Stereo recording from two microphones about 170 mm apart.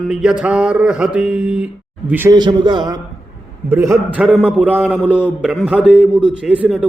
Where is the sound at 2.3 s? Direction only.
25° right (ahead or behind); by 5.5 s 5° right (ahead or behind).